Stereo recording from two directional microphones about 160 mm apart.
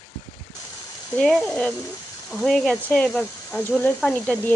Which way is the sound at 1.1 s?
5° left (ahead or behind).